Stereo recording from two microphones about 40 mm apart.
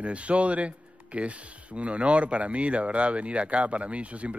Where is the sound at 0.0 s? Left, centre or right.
Right.